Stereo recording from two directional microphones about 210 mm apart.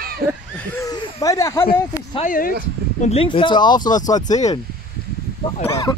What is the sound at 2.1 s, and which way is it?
Speech, 35° left (ahead or behind).